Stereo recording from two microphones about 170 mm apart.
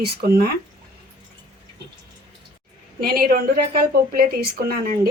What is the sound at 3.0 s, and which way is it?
A woman's voice, 60° right (ahead or behind).